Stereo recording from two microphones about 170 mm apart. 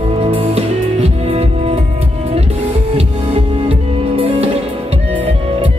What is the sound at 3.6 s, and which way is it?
Music, 35° right (ahead or behind).